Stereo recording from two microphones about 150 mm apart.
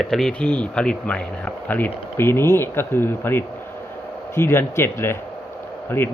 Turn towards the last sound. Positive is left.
turn(degrees=15)  # may be behind; listen again after turning